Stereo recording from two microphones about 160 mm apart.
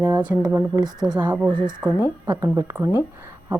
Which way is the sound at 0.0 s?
30° right (ahead or behind).